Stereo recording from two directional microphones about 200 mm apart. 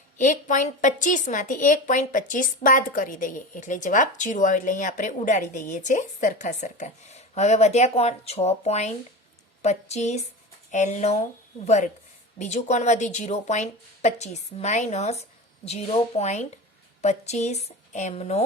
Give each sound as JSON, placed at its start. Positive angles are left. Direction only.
{"t": 0.2, "sound": "a woman's voice", "side_deg": 40}